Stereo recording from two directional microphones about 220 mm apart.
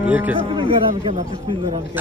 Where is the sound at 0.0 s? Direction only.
10° right (ahead or behind).